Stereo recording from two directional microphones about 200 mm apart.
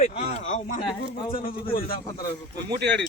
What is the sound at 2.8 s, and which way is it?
Speech, 60° right (ahead or behind).